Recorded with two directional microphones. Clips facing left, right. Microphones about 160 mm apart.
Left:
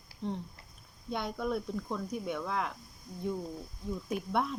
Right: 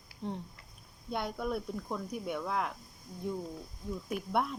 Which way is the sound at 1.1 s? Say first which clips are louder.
Left 1 dB; 5° right (ahead or behind).